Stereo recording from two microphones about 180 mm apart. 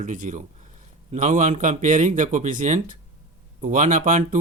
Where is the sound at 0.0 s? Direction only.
45° right (ahead or behind).